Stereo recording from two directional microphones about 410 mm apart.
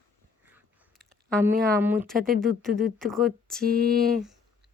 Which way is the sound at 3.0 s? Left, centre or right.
Centre.